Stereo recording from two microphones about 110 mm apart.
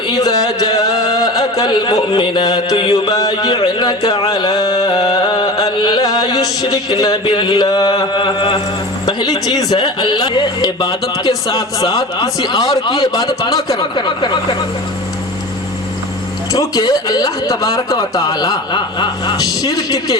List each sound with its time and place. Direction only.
0.1 s a sound: 35° left (ahead or behind)
9.0 s speech: 35° left (ahead or behind)
16.5 s speech: 35° left (ahead or behind)